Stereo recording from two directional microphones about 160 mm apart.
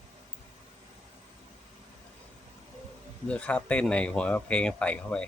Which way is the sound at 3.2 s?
5° left (ahead or behind).